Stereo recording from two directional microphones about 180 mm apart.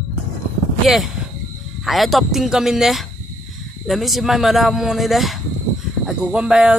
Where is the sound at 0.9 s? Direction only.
Centre (ahead or behind).